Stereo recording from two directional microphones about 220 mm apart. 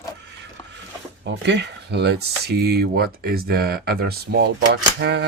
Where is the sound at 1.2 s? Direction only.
50° right (ahead or behind).